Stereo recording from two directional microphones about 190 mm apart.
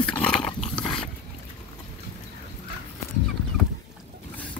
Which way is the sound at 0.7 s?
5° left (ahead or behind).